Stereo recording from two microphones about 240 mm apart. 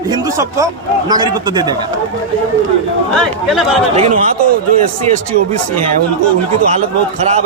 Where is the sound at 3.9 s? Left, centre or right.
Right.